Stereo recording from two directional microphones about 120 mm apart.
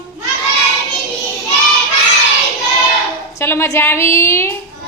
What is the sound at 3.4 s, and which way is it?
A woman's voice, 20° left (ahead or behind).